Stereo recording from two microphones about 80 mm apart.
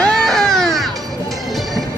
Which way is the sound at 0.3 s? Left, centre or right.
Centre.